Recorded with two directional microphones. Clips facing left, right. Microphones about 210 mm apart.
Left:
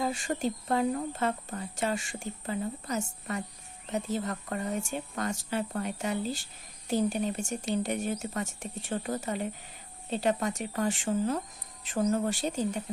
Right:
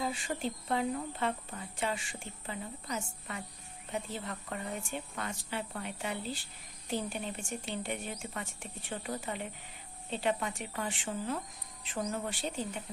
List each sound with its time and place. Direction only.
0.0 s speech: 45° left (ahead or behind)